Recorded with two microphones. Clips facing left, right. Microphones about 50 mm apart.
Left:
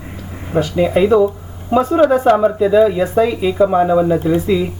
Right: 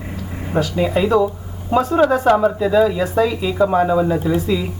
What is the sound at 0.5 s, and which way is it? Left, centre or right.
Speech, left.